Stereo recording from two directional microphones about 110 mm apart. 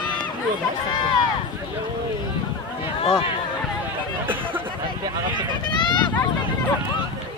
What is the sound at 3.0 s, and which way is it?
Speech, 55° left (ahead or behind).